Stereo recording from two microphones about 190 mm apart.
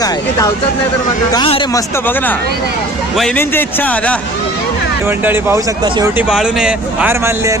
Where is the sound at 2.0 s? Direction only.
10° left (ahead or behind).